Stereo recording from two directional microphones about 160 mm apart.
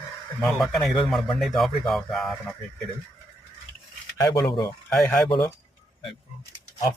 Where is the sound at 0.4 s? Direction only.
Centre (ahead or behind).